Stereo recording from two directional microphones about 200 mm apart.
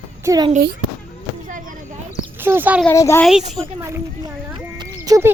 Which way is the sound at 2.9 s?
15° left (ahead or behind).